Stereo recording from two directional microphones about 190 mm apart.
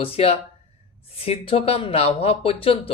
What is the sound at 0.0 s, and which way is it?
Speech, 30° left (ahead or behind).